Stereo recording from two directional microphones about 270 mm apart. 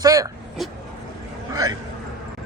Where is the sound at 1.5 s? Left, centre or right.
Centre.